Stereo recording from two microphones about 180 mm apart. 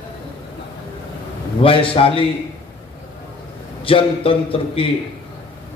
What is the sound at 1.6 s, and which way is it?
Speech, 30° left (ahead or behind).